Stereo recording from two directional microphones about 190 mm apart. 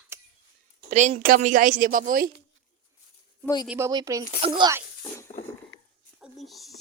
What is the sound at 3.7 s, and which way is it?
A child's voice, 15° right (ahead or behind).